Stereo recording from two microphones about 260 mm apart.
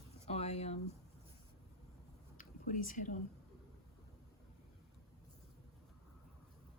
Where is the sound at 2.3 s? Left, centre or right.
Left.